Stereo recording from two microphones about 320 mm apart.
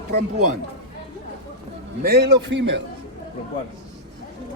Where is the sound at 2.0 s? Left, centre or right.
Right.